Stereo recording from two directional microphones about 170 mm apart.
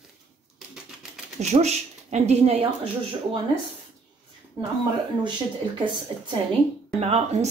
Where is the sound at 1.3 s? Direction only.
40° right (ahead or behind).